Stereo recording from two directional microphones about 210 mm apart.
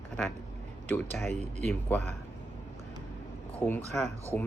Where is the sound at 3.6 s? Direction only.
5° left (ahead or behind).